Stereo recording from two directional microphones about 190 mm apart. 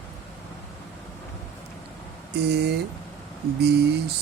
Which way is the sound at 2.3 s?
60° right (ahead or behind).